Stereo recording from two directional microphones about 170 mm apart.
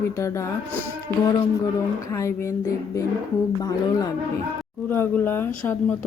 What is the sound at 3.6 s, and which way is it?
Speech, 20° left (ahead or behind).